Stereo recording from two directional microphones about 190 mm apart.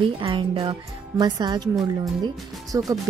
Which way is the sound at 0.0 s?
25° right (ahead or behind).